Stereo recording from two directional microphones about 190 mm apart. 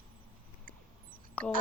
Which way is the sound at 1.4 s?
10° left (ahead or behind).